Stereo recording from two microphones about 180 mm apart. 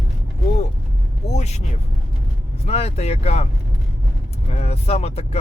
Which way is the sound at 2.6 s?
35° left (ahead or behind).